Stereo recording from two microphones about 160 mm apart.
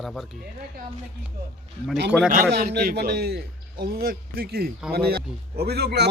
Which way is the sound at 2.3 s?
70° right (ahead or behind).